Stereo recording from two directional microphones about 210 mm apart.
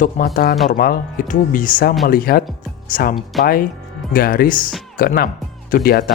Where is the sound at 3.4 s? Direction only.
45° left (ahead or behind).